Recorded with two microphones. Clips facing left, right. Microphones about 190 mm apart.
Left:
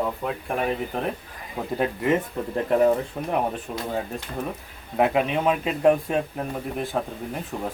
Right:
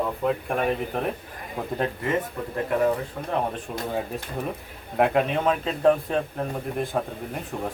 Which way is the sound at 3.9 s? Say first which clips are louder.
Even; centre (ahead or behind).